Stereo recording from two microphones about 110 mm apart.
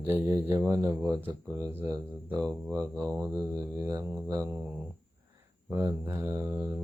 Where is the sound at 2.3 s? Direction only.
20° right (ahead or behind).